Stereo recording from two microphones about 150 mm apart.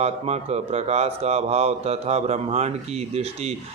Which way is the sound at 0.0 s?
45° right (ahead or behind).